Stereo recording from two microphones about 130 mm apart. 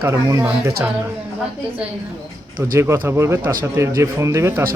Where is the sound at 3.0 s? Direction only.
20° right (ahead or behind).